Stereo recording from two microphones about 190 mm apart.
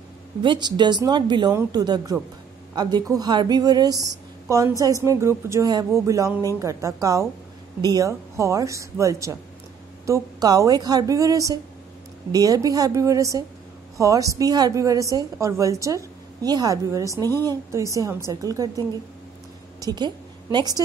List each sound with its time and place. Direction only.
0.4 s a woman's voice: 25° right (ahead or behind)
19.8 s a woman's voice: 20° right (ahead or behind)